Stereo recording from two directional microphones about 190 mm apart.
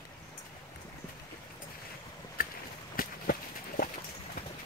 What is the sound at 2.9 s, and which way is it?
Run, 50° left (ahead or behind).